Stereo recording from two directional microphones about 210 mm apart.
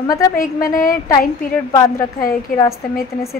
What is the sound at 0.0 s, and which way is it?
Speech, 15° left (ahead or behind).